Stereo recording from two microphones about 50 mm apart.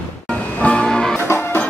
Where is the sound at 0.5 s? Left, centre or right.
Left.